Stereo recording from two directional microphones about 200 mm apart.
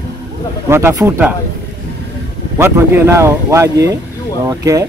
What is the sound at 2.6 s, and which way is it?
Speech, 10° right (ahead or behind).